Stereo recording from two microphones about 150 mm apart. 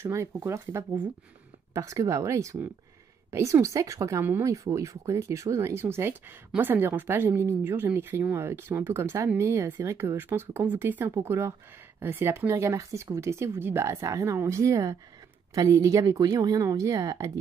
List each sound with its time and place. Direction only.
0.0 s speech: 20° right (ahead or behind)